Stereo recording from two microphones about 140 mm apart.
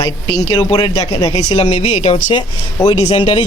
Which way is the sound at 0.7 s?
30° left (ahead or behind).